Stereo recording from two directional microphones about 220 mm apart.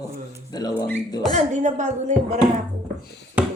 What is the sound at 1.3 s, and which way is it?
Speech, 30° right (ahead or behind).